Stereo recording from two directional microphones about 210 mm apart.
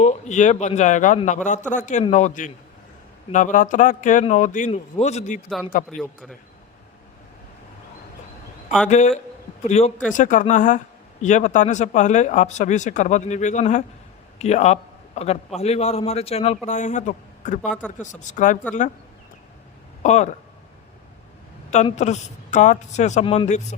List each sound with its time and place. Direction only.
0.0 s a man's voice: 35° left (ahead or behind)
8.9 s a man's voice: 35° left (ahead or behind)
20.0 s a man's voice: 35° left (ahead or behind)
21.8 s a man's voice: 35° left (ahead or behind)